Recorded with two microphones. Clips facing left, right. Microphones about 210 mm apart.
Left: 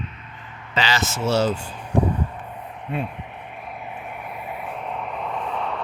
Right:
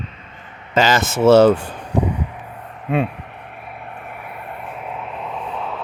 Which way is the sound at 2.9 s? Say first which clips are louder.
Right 8 dB; 80° right.